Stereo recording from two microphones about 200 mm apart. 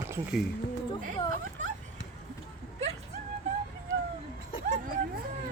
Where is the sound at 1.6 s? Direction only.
40° right (ahead or behind).